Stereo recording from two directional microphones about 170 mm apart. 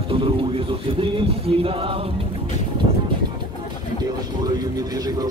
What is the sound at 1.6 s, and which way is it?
Music, 35° right (ahead or behind).